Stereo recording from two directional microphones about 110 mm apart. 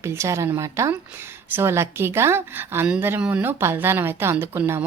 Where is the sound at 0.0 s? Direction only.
25° right (ahead or behind).